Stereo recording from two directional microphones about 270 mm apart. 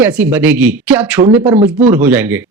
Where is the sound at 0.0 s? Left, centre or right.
Centre.